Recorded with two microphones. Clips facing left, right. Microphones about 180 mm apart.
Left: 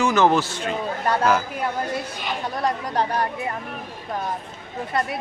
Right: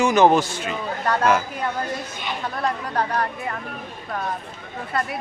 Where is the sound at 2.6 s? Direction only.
20° left (ahead or behind).